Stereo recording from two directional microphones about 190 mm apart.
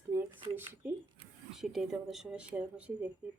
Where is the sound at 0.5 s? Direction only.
10° right (ahead or behind).